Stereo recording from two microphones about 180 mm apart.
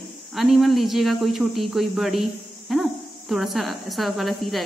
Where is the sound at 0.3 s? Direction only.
Centre (ahead or behind).